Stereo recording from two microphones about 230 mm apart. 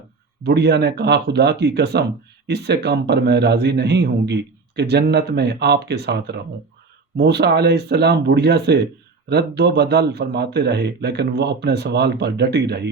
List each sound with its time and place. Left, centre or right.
0.4 s a man's voice: right